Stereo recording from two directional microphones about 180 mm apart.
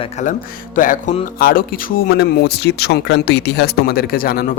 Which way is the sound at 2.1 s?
65° left (ahead or behind).